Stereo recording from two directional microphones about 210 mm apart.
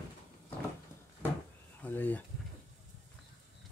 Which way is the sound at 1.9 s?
10° left (ahead or behind).